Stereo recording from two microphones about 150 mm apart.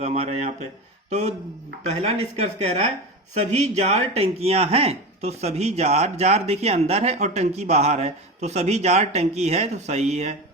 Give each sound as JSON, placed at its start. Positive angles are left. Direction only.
{"t": 0.0, "sound": "speech", "side_deg": -45}
{"t": 2.0, "sound": "speech", "side_deg": -45}